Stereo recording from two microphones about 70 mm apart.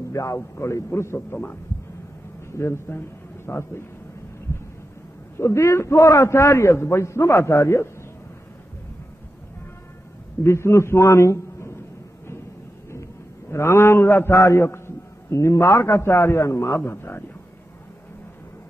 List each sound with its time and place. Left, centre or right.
0.1 s a man's voice: left
1.1 s a man's voice: left
5.4 s a man's voice: left
10.4 s a man's voice: left
13.5 s a man's voice: left
16.8 s a man's voice: left